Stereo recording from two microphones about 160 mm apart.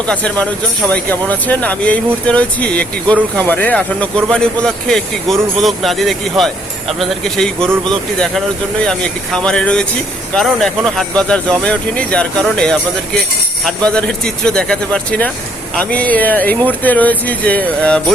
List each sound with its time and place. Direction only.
0.1 s speech: 5° left (ahead or behind)